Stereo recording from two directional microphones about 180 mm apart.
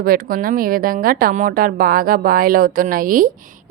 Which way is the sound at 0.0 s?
55° right (ahead or behind).